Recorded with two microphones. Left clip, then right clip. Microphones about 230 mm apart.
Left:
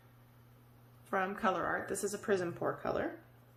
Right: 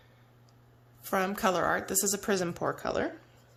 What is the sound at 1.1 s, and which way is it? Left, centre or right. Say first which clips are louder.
Speech: right 5 dB; right.